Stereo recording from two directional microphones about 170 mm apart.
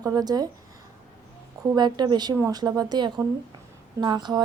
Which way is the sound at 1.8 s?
25° right (ahead or behind).